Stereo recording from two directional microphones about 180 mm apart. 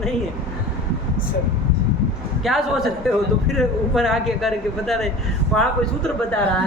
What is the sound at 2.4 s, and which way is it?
Speech, centre (ahead or behind).